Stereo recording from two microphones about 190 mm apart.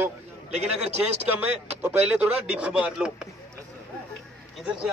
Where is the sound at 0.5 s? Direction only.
35° right (ahead or behind).